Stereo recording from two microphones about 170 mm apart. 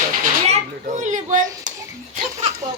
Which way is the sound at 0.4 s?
40° right (ahead or behind).